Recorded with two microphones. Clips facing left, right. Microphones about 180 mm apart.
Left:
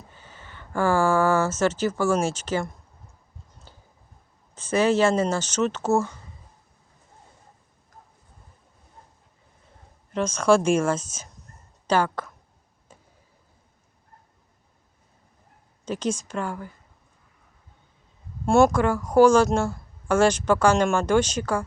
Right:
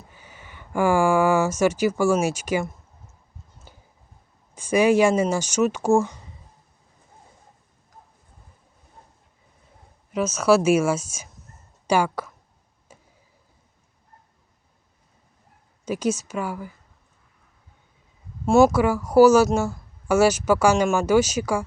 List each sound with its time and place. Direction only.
0.2 s a sound: 15° right (ahead or behind)
3.7 s a sound: 15° right (ahead or behind)
4.5 s a woman's voice: 10° right (ahead or behind)
10.1 s a woman's voice: 5° right (ahead or behind)
15.8 s a woman's voice: 10° right (ahead or behind)
18.4 s a woman's voice: centre (ahead or behind)